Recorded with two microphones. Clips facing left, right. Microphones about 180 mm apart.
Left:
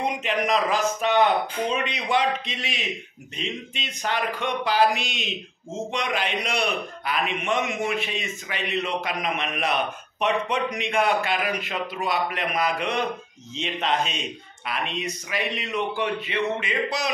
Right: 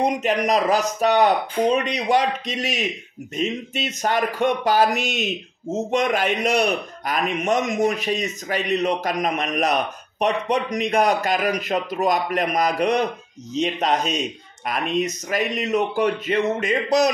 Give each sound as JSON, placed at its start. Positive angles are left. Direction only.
{"t": 0.0, "sound": "speech", "side_deg": -40}